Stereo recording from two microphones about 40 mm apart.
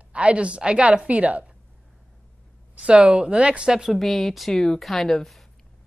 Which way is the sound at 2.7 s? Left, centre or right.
Right.